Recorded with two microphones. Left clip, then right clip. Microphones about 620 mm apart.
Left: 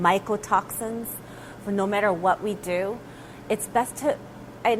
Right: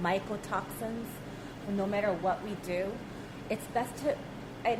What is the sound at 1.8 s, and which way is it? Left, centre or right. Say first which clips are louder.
A woman's voice: left 8 dB; left.